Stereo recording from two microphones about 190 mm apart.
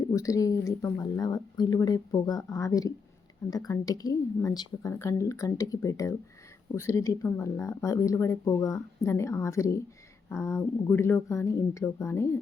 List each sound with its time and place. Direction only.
0.1 s speech: 15° left (ahead or behind)